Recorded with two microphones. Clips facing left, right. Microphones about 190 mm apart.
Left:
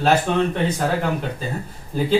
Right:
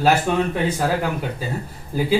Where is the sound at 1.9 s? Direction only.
5° right (ahead or behind).